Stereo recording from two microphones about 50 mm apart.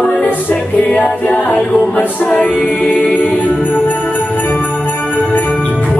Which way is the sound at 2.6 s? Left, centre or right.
Centre.